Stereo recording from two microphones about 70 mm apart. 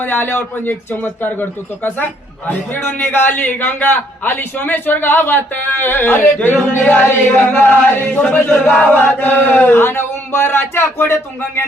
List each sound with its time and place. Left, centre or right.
0.0 s a man's voice: left
9.0 s chant: left